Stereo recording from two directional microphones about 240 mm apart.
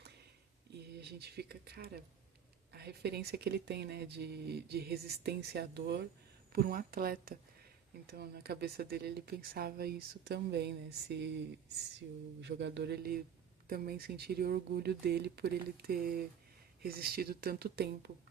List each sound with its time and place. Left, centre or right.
0.9 s speech: right
12.4 s speech: right